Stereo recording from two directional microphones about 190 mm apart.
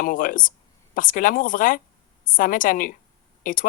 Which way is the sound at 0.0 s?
45° left (ahead or behind).